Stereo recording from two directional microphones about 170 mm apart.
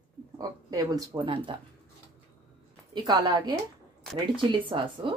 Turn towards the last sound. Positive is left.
turn(degrees=-30)  # may be behind; listen again after turning